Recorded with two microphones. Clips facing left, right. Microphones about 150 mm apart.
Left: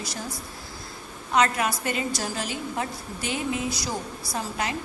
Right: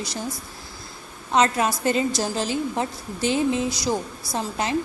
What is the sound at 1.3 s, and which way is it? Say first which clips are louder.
A woman's voice: right 3 dB; 30° right (ahead or behind).